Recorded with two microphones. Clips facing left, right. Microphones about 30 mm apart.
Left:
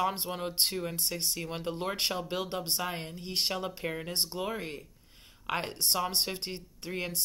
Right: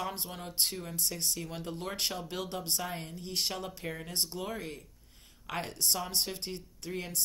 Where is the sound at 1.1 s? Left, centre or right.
Left.